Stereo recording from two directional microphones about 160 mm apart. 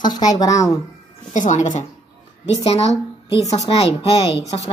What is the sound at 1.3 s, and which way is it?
Speech, 50° left (ahead or behind).